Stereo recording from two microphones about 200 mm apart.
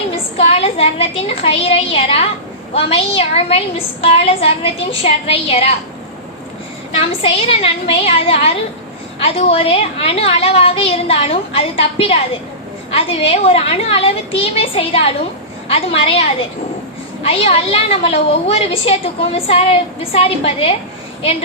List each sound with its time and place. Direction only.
0.3 s a woman's voice: 30° left (ahead or behind)
6.9 s a woman's voice: 30° left (ahead or behind)
17.2 s a woman's voice: 30° left (ahead or behind)